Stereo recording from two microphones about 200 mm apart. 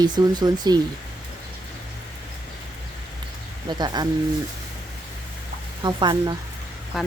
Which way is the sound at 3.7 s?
20° right (ahead or behind).